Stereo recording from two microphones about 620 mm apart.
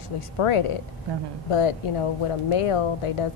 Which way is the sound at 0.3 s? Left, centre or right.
Left.